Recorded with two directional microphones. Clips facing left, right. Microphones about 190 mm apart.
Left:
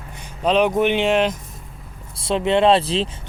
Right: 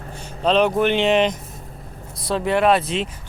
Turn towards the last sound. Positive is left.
turn(degrees=30)  # may be behind; listen again after turning